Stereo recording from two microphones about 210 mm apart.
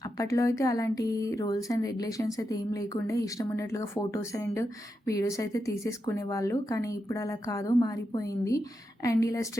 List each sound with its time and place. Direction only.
0.0 s speech: 15° left (ahead or behind)